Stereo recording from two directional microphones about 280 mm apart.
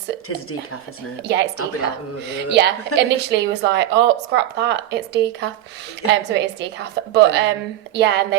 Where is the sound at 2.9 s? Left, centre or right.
Right.